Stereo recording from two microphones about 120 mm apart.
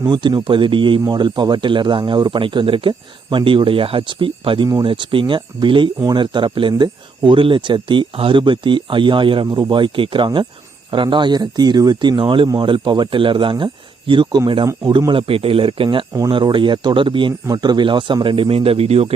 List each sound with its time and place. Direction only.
0.1 s speech: 40° right (ahead or behind); by 19.0 s 55° right (ahead or behind)